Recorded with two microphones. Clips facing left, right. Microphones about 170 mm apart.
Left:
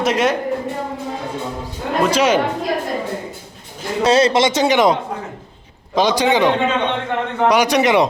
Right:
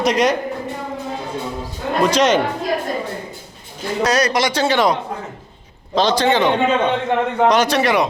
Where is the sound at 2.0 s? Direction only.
5° left (ahead or behind).